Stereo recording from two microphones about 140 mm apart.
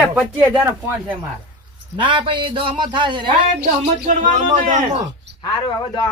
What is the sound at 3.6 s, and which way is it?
Speech, 65° right (ahead or behind).